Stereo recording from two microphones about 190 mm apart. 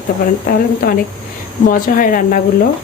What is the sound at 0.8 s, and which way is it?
A woman's voice, 50° left (ahead or behind).